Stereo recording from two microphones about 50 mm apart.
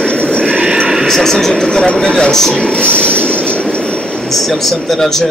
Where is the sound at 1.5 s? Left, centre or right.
Centre.